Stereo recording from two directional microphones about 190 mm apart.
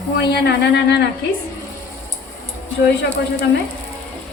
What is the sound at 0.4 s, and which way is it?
Speech, 65° left (ahead or behind).